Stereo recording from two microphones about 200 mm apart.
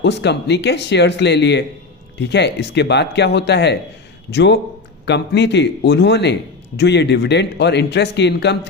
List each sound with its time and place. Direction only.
0.0 s a man's voice: 60° left (ahead or behind)